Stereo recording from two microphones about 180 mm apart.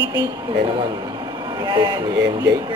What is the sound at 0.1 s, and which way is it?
A man's voice, 20° right (ahead or behind).